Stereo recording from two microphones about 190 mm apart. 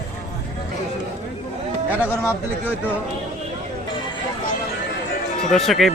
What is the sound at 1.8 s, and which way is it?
Speech, 10° right (ahead or behind).